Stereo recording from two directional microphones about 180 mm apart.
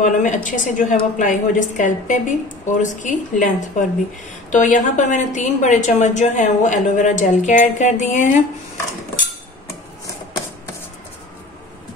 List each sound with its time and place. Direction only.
0.0 s a woman's voice: 45° left (ahead or behind)